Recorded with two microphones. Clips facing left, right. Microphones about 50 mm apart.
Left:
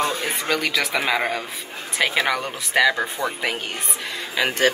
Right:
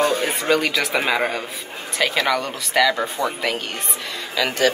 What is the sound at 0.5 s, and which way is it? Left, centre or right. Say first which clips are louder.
Speech: right 3 dB; centre.